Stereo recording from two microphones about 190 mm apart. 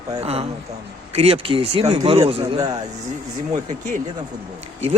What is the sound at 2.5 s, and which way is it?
Speech, 20° right (ahead or behind).